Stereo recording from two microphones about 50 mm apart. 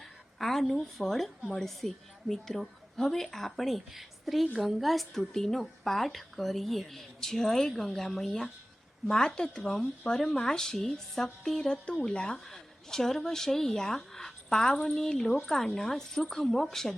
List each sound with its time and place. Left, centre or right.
0.3 s a woman's voice: centre
12.5 s speech: centre